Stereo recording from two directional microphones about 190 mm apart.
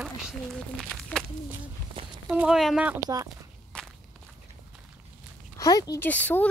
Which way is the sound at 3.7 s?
5° left (ahead or behind).